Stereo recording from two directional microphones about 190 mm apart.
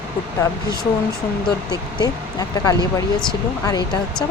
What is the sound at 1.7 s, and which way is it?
Speech, 20° left (ahead or behind).